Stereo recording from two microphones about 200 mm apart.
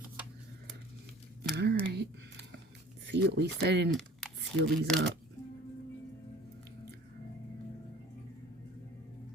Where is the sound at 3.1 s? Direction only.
55° right (ahead or behind).